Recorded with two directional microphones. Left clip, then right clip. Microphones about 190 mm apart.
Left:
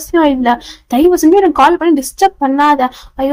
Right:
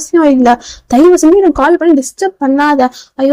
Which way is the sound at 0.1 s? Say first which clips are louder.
Right 3 dB; 15° right (ahead or behind).